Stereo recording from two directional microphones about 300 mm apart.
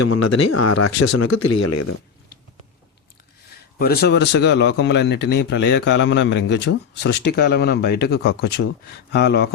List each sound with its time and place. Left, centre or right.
0.0 s speech: left
3.8 s speech: left